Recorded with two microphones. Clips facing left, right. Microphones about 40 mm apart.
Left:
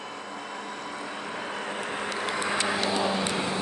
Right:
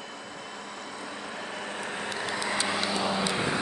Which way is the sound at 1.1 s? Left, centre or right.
Left.